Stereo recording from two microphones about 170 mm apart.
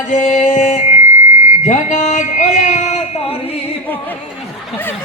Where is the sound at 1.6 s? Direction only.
45° left (ahead or behind).